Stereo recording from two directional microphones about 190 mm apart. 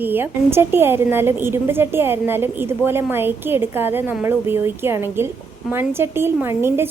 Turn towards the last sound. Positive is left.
turn(degrees=-10)  # may be behind; listen again after turning